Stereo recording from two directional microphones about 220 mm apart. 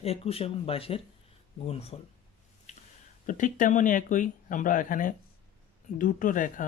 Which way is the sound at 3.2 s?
35° left (ahead or behind).